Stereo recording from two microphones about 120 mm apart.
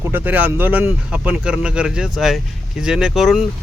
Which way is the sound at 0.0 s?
15° right (ahead or behind).